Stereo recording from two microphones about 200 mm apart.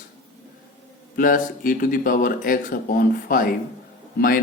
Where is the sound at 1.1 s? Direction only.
45° left (ahead or behind).